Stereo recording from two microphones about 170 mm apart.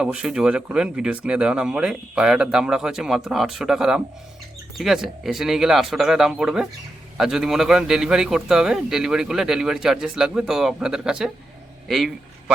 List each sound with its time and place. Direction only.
0.0 s a man's voice: 5° right (ahead or behind)